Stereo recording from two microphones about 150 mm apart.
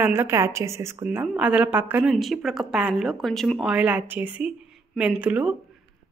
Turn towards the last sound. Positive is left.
turn(degrees=-5)  # may be behind; listen again after turning